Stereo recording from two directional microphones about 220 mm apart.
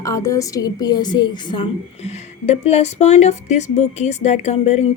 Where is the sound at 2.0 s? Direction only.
30° left (ahead or behind).